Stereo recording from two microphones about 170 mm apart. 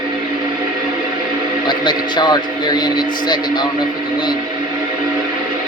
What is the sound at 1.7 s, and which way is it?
A man's voice, 25° left (ahead or behind).